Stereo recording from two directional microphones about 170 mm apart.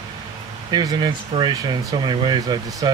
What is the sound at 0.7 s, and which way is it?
Speech, 25° right (ahead or behind).